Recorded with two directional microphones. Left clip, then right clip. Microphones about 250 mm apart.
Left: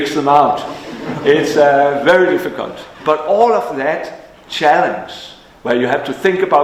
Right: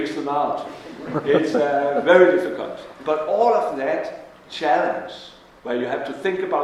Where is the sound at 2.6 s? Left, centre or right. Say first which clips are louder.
Left 7 dB; left.